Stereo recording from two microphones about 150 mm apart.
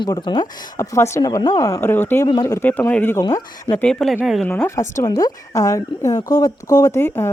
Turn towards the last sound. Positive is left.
turn(degrees=15)  # may be behind; listen again after turning